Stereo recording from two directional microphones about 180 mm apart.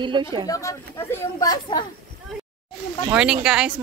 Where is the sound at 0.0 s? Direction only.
25° right (ahead or behind).